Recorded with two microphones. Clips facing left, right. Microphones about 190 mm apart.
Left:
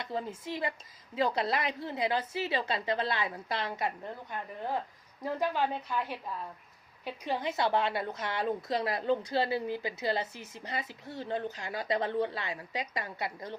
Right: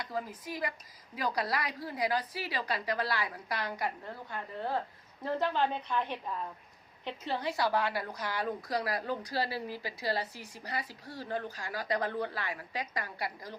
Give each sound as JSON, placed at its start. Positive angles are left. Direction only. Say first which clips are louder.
{"t": 0.0, "sound": "a woman's voice", "louder": "left 2 dB", "side_deg": 25}